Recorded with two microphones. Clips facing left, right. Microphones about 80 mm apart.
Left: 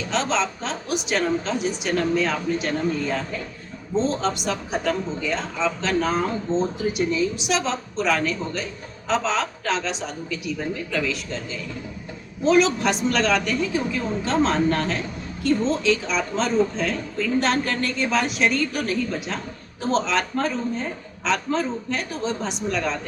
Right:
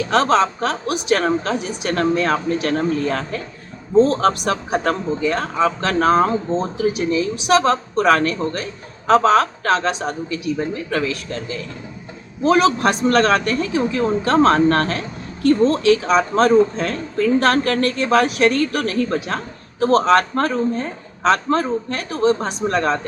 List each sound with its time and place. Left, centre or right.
0.1 s a man's voice: right
12.5 s a man's voice: right
13.7 s a man's voice: right
22.1 s speech: right